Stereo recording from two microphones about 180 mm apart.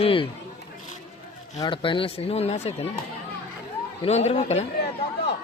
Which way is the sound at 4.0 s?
35° left (ahead or behind).